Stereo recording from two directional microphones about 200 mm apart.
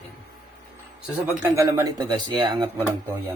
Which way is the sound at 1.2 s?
15° right (ahead or behind).